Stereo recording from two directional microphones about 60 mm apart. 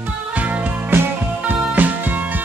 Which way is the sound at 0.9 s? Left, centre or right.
Right.